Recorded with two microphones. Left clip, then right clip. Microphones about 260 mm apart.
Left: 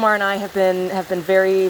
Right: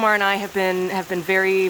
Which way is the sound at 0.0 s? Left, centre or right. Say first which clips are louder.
Left 1 dB; centre.